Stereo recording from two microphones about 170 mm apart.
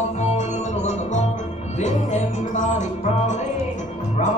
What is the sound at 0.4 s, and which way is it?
Music, 45° left (ahead or behind).